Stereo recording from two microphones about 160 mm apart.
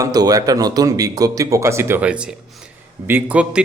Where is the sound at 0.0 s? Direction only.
25° right (ahead or behind).